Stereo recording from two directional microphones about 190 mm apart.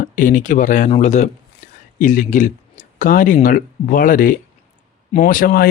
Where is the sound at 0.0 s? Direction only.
45° left (ahead or behind).